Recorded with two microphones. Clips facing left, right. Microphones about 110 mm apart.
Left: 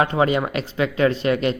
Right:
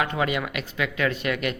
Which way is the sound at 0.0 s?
35° left (ahead or behind).